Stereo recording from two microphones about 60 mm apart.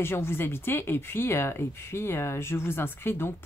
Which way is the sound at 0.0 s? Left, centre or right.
Left.